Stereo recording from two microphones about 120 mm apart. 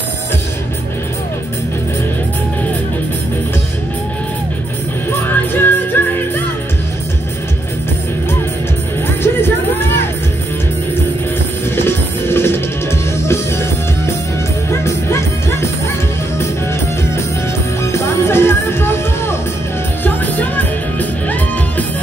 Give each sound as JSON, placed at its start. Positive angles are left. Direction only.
{"t": 5.2, "sound": "music", "side_deg": 15}
{"t": 9.2, "sound": "music", "side_deg": 20}
{"t": 11.7, "sound": "music", "side_deg": 20}
{"t": 17.9, "sound": "music", "side_deg": 20}